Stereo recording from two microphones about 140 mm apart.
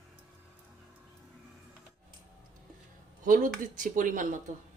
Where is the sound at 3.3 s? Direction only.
70° right (ahead or behind).